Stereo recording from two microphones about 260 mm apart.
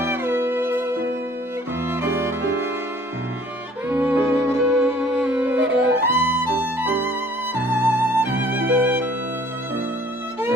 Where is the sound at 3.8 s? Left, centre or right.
Centre.